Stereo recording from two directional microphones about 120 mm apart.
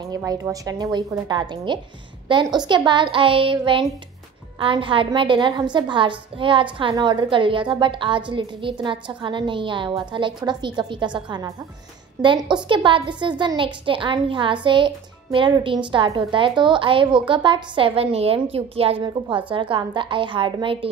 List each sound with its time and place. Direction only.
0.2 s a woman's voice: 30° right (ahead or behind); by 19.0 s 55° right (ahead or behind)
19.0 s a woman's voice: 40° right (ahead or behind)